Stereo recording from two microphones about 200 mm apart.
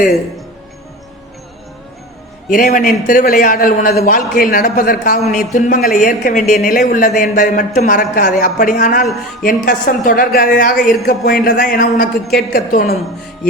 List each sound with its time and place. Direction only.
2.5 s a man's voice: 40° left (ahead or behind)